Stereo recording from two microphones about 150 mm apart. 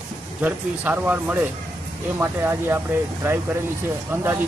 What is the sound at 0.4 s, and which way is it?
Speech, 10° right (ahead or behind).